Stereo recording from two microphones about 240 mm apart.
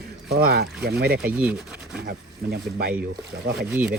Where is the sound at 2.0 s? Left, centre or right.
Right.